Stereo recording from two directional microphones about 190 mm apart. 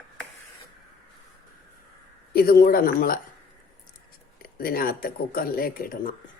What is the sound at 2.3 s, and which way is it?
Speech, 50° left (ahead or behind).